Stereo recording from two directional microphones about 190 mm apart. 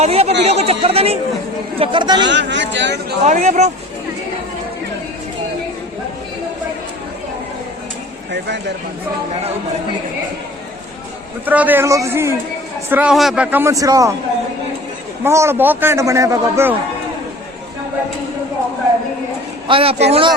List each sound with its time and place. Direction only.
0.0 s a man's voice: 30° right (ahead or behind)
2.2 s speech: 70° right (ahead or behind)
3.2 s speech: 40° right (ahead or behind)
8.3 s speech: 65° right (ahead or behind)
11.4 s a man's voice: 10° right (ahead or behind)
15.2 s a man's voice: 15° right (ahead or behind)
19.6 s a man's voice: 30° right (ahead or behind)